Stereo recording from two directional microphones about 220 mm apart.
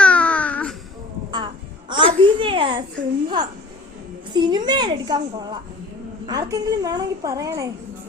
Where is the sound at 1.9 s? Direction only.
25° right (ahead or behind).